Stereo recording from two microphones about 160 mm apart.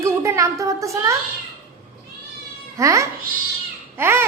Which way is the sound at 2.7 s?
20° right (ahead or behind).